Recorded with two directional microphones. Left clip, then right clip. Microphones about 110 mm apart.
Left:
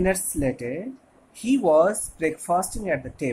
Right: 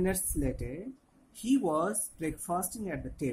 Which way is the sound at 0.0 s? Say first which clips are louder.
Left 9 dB; 15° right (ahead or behind).